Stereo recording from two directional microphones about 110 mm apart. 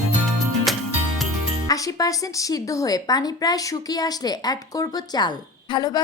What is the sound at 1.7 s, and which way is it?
Speech, 30° left (ahead or behind).